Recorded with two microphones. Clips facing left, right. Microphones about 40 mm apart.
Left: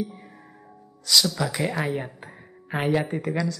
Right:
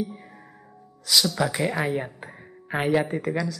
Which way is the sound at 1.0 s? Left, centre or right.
Centre.